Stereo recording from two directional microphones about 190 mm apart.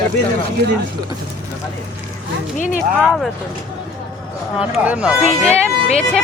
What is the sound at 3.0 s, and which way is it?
Speech, 5° right (ahead or behind).